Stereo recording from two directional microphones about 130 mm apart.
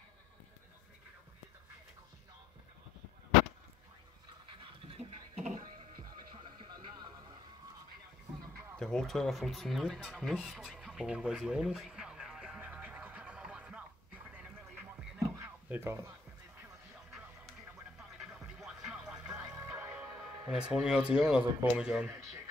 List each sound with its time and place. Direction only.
4.9 s music: 65° right (ahead or behind)
6.4 s music: 35° right (ahead or behind)
8.7 s a sound: 5° left (ahead or behind); by 16.0 s 15° right (ahead or behind)
18.1 s music: 5° right (ahead or behind)
21.2 s speech: 5° right (ahead or behind)